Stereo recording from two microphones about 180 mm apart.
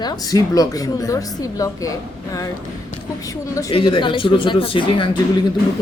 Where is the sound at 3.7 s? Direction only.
30° left (ahead or behind).